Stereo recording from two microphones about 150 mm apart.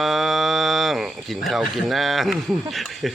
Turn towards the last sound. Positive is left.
turn(degrees=0)  # may be behind; listen again after turning